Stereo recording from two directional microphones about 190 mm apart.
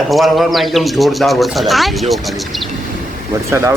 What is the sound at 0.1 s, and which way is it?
Speech, centre (ahead or behind).